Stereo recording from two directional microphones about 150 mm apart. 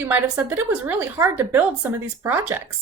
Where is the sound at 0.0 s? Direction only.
10° right (ahead or behind).